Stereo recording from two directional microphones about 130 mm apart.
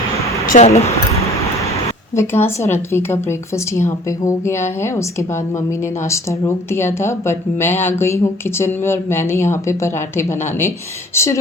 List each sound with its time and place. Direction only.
0.4 s speech: 90° left
2.1 s speech: 20° left (ahead or behind)
6.1 s speech: 20° left (ahead or behind)